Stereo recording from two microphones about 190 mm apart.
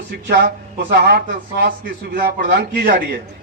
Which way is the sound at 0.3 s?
60° right (ahead or behind).